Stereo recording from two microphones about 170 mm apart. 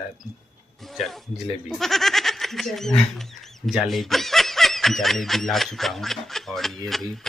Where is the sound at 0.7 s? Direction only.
Centre (ahead or behind).